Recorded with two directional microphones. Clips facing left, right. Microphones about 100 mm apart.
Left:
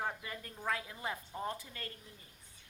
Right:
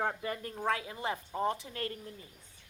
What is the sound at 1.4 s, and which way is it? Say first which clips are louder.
Speech: right 10 dB; 75° right (ahead or behind).